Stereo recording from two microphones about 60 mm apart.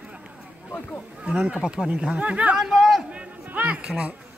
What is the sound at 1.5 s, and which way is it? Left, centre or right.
Speech, centre.